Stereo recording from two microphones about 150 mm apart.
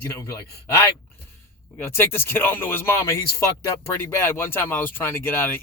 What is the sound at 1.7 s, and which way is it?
Speech, 15° left (ahead or behind).